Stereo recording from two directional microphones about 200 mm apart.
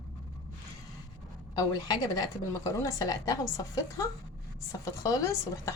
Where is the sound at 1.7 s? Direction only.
20° left (ahead or behind).